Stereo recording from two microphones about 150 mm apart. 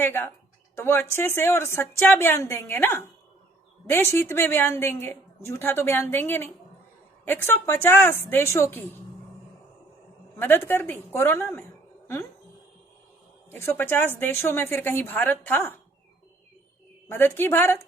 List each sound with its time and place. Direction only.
0.0 s a woman's voice: 15° left (ahead or behind)
10.3 s a woman's voice: 15° left (ahead or behind)
13.5 s a woman's voice: 15° left (ahead or behind)
17.1 s a woman's voice: 15° left (ahead or behind)